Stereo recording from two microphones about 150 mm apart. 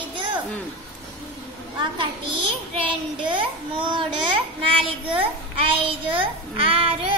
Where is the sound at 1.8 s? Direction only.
30° right (ahead or behind).